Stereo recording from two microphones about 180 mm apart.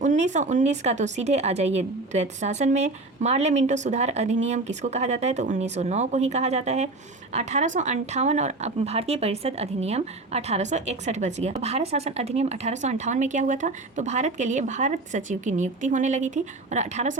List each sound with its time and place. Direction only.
0.0 s a woman's voice: 40° right (ahead or behind)